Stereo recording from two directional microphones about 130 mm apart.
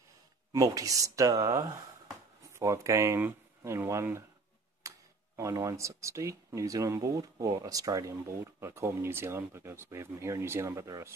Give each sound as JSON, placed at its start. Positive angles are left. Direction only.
{"t": 0.5, "sound": "speech", "side_deg": -25}